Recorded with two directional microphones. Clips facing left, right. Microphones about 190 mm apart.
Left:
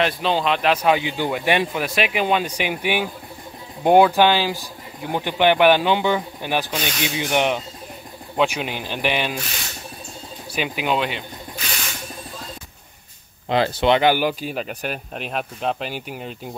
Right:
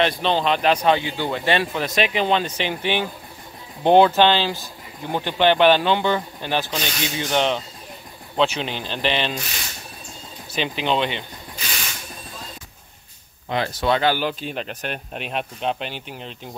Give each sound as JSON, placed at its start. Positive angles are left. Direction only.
{"t": 0.0, "sound": "speech", "side_deg": 5}
{"t": 0.9, "sound": "speech", "side_deg": 15}
{"t": 10.5, "sound": "speech", "side_deg": 10}
{"t": 13.5, "sound": "speech", "side_deg": 30}
{"t": 13.9, "sound": "speech", "side_deg": 15}